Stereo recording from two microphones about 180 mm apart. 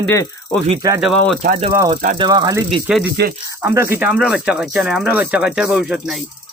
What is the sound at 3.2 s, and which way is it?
Speech, 65° right (ahead or behind).